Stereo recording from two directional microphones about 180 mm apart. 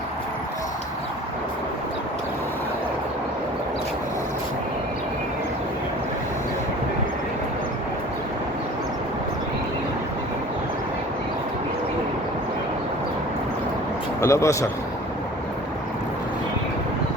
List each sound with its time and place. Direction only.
14.2 s speech: 15° left (ahead or behind)